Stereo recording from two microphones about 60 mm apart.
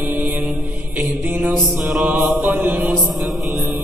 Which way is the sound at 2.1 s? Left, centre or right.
Right.